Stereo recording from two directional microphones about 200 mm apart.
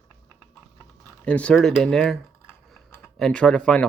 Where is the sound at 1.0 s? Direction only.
5° left (ahead or behind).